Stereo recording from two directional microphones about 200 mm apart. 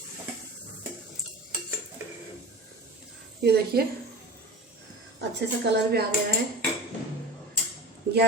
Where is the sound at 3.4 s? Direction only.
55° right (ahead or behind).